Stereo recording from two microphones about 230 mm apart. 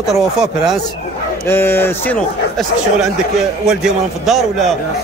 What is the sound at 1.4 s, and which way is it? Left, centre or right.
Speech, centre.